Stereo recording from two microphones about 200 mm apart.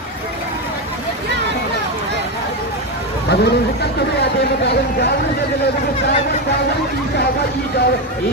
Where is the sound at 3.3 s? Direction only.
55° left (ahead or behind).